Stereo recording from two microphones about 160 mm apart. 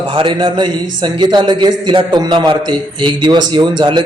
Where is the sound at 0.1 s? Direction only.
30° right (ahead or behind).